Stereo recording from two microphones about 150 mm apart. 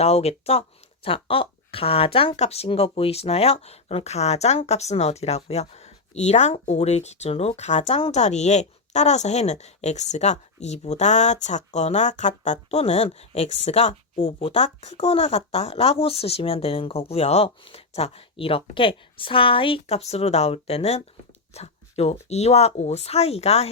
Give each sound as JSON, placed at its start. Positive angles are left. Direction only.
{"t": 0.0, "sound": "speech", "side_deg": 45}